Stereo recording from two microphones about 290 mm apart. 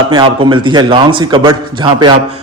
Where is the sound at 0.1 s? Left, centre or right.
Centre.